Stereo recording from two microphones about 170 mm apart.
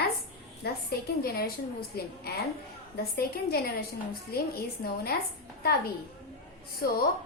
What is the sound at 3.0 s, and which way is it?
A woman's voice, 65° left (ahead or behind).